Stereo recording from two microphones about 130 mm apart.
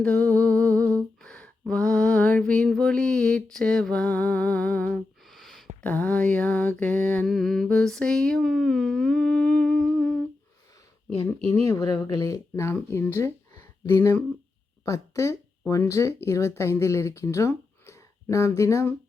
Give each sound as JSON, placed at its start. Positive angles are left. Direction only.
{"t": 0.0, "sound": "humming", "side_deg": 10}
{"t": 5.8, "sound": "mantra", "side_deg": 10}
{"t": 7.3, "sound": "a sound", "side_deg": 0}
{"t": 11.6, "sound": "speech", "side_deg": 25}
{"t": 13.8, "sound": "mantra", "side_deg": 20}
{"t": 14.8, "sound": "speech", "side_deg": 25}